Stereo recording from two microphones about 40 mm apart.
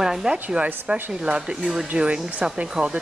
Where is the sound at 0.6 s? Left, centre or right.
Right.